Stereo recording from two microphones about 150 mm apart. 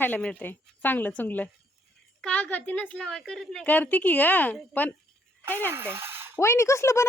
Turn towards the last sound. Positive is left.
turn(degrees=20)  # may be behind; listen again after turning